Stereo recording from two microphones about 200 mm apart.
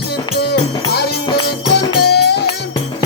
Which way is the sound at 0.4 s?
55° left (ahead or behind).